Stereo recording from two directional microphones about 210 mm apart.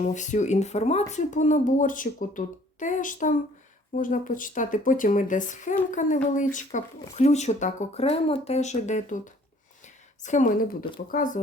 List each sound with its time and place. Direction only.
0.0 s a woman's voice: 35° left (ahead or behind)
9.8 s a sound: 35° left (ahead or behind)
11.1 s a woman's voice: 40° left (ahead or behind)